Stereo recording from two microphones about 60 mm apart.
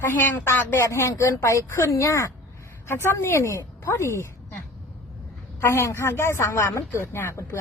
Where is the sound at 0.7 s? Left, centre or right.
Left.